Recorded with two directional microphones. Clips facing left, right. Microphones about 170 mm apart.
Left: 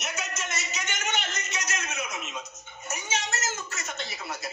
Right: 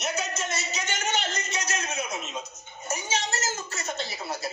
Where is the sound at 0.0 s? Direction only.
30° right (ahead or behind).